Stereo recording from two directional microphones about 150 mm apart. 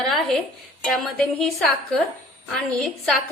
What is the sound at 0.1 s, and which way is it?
Music, centre (ahead or behind).